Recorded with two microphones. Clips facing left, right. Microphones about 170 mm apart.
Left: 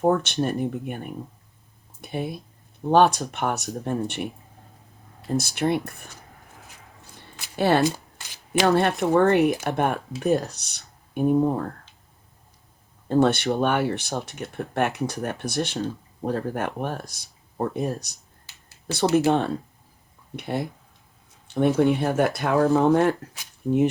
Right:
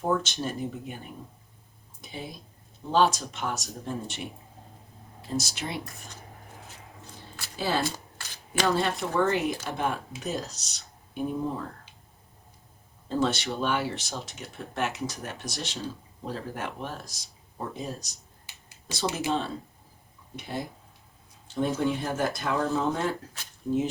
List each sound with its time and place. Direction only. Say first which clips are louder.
0.0 s speech: left 6 dB; 60° left (ahead or behind)
5.4 s speech: left 14 dB; 55° left (ahead or behind)
7.5 s speech: left 8 dB; 65° left (ahead or behind)
13.1 s speech: left 8 dB; 60° left (ahead or behind)